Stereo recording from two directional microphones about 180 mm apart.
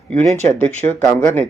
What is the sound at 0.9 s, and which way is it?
Speech, 15° left (ahead or behind).